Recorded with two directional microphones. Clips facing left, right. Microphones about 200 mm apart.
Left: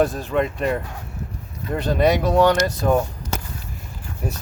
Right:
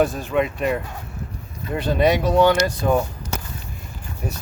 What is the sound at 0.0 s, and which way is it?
Speech, centre (ahead or behind).